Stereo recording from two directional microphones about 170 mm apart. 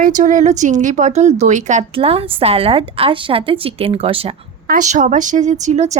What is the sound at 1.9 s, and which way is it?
A woman's voice, 35° right (ahead or behind).